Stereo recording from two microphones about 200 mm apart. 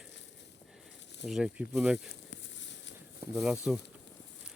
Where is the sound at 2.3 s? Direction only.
65° left (ahead or behind).